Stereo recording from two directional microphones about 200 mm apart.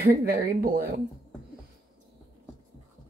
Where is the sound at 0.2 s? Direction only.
45° right (ahead or behind).